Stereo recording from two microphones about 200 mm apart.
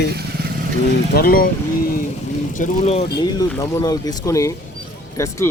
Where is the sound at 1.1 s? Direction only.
45° left (ahead or behind).